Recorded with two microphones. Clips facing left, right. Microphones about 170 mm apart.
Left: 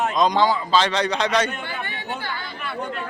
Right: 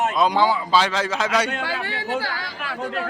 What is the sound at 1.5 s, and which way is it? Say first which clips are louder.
Speech: right 4 dB; 90° right.